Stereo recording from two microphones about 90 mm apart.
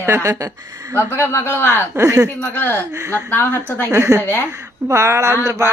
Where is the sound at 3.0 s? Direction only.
35° right (ahead or behind).